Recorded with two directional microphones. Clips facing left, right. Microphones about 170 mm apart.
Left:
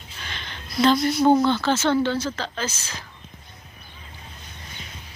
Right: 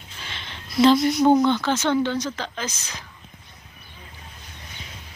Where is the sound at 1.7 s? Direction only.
15° right (ahead or behind).